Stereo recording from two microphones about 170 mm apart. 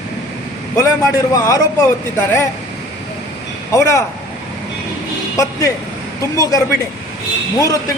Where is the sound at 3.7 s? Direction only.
20° left (ahead or behind).